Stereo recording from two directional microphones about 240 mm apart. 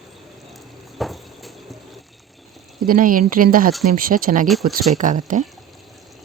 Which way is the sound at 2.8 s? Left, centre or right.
Right.